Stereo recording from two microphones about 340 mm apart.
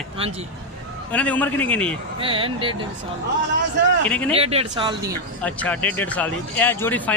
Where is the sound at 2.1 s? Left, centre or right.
Centre.